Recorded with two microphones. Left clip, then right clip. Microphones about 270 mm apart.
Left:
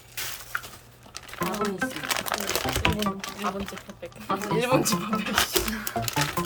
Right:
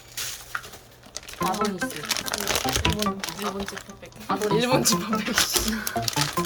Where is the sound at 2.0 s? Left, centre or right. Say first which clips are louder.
Even; centre.